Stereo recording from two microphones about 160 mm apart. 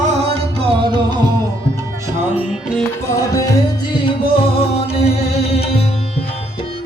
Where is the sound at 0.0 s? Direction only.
35° right (ahead or behind).